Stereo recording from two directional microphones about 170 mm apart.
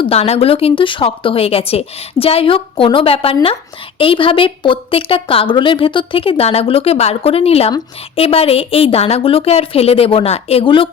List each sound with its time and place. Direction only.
0.0 s a woman's voice: 35° left (ahead or behind)